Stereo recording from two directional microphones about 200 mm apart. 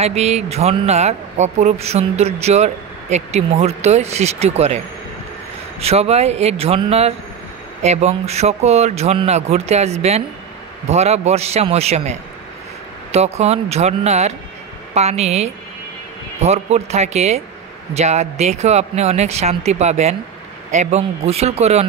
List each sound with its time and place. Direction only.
0.0 s speech: 35° right (ahead or behind)
5.8 s speech: 30° right (ahead or behind)